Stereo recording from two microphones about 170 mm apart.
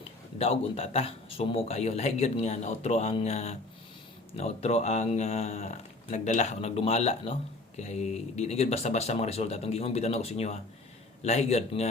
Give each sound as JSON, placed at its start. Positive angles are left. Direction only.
{"t": 0.3, "sound": "speech", "side_deg": 35}